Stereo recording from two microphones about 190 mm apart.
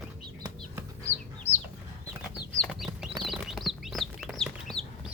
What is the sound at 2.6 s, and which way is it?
Chicken, centre (ahead or behind).